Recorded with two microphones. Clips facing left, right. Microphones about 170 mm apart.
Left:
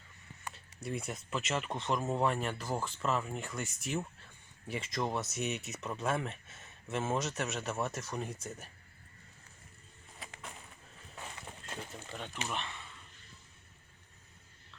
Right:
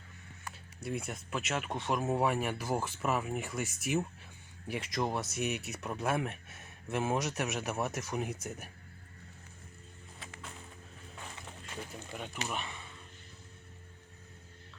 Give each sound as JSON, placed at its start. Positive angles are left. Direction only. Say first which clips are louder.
{"t": 0.5, "sound": "speech", "louder": "right 2 dB", "side_deg": 0}
{"t": 10.2, "sound": "a sound", "louder": "left 1 dB", "side_deg": 0}
{"t": 12.1, "sound": "speech", "louder": "right 1 dB", "side_deg": -10}